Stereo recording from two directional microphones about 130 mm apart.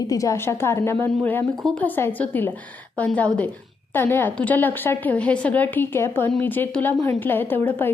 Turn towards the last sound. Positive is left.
turn(degrees=15)  # may be behind; listen again after turning